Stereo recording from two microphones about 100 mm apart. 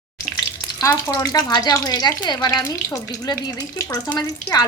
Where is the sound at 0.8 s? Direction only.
35° left (ahead or behind).